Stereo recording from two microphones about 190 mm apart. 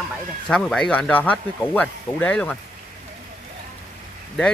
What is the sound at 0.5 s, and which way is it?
Speech, 5° left (ahead or behind).